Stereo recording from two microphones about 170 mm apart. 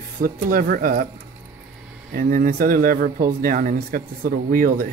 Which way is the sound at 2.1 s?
55° right (ahead or behind).